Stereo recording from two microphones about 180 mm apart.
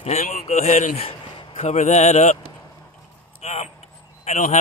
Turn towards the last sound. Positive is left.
turn(degrees=40)  # may be behind; listen again after turning